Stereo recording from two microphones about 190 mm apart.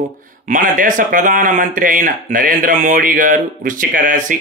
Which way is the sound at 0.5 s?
45° right (ahead or behind).